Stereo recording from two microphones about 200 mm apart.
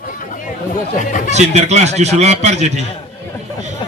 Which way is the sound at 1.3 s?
35° right (ahead or behind).